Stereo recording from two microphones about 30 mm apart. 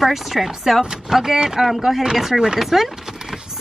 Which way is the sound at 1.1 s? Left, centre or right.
Centre.